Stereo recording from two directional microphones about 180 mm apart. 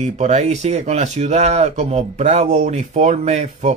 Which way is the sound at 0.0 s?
40° right (ahead or behind).